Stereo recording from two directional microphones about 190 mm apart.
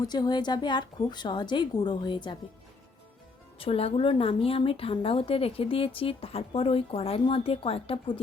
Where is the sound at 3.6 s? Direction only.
30° left (ahead or behind).